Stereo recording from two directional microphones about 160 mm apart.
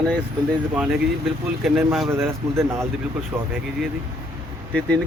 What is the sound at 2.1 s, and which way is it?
Speech, 15° right (ahead or behind).